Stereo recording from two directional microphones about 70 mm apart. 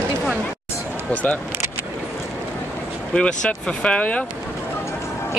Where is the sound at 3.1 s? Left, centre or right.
Centre.